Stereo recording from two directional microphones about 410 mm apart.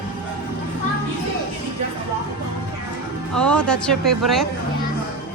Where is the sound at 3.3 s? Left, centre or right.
Centre.